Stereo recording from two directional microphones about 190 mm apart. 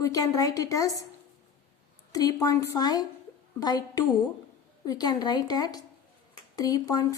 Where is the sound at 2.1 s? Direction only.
20° left (ahead or behind).